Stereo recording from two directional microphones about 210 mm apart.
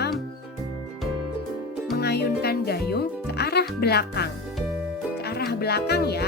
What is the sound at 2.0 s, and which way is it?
Speech, 50° left (ahead or behind).